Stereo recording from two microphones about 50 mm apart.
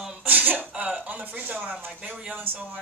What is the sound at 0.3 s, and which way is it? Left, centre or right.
Throat clearing, right.